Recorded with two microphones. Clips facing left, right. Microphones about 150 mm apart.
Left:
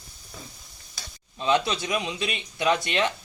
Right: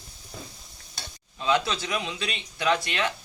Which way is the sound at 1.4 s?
20° left (ahead or behind).